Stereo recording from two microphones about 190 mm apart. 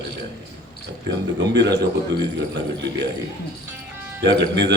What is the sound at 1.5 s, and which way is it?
Speech, 60° right (ahead or behind).